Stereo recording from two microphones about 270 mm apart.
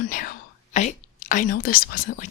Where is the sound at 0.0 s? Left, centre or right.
Left.